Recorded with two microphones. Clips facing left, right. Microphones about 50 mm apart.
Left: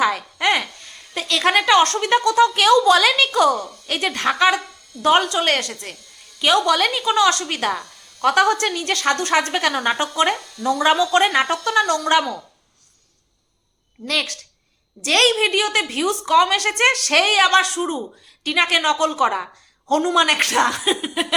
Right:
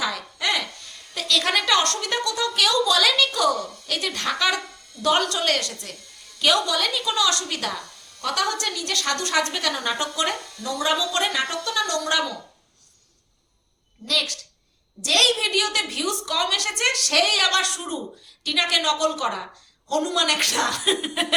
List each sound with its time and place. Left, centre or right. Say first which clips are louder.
0.0 s a woman's voice: left 7 dB; left
7.0 s a woman's voice: left 6 dB; left
14.1 s a woman's voice: left 2 dB; left
20.8 s speech: left 2 dB; centre